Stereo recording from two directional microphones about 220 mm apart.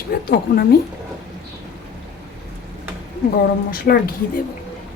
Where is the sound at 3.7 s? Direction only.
45° left (ahead or behind).